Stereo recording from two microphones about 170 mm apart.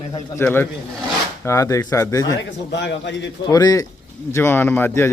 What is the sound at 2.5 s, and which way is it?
Speech, 90° left.